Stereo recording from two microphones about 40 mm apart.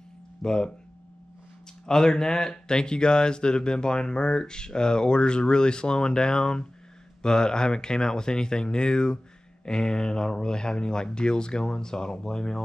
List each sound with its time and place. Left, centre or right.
0.4 s speech: centre
1.9 s speech: centre